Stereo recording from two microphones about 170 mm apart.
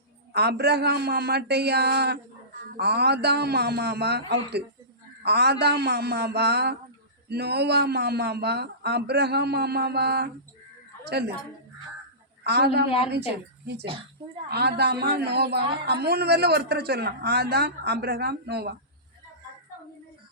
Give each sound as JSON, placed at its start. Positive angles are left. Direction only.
{"t": 0.3, "sound": "a man's voice", "side_deg": -75}
{"t": 11.0, "sound": "a sound", "side_deg": -75}
{"t": 12.4, "sound": "a man's voice", "side_deg": -75}
{"t": 14.5, "sound": "a man's voice", "side_deg": -75}